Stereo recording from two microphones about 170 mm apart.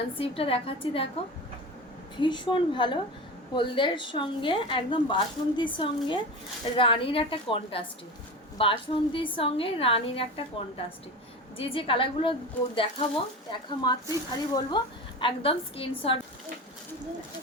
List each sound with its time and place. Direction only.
0.2 s a woman's voice: 35° left (ahead or behind)
2.2 s a woman's voice: 25° left (ahead or behind)